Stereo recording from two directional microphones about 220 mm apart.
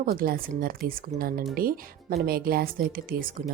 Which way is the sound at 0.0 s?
40° right (ahead or behind).